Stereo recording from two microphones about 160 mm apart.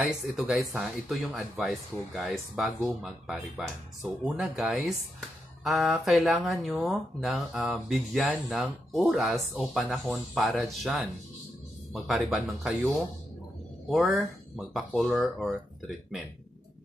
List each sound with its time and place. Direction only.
0.1 s speech: centre (ahead or behind)
13.8 s speech: centre (ahead or behind)